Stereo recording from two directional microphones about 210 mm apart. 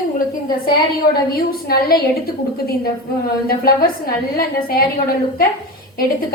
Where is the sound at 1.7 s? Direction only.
45° left (ahead or behind).